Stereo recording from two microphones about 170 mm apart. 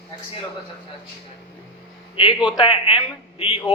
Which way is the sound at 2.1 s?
25° left (ahead or behind).